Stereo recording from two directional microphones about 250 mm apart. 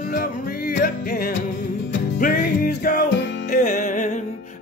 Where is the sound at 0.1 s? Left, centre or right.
Left.